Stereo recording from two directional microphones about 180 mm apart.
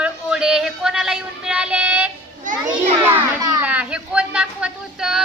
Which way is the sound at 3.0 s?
10° right (ahead or behind).